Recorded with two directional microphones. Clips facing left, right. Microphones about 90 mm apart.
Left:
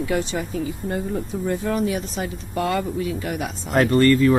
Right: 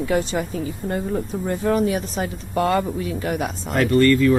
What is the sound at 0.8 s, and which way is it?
Speech, 55° right (ahead or behind).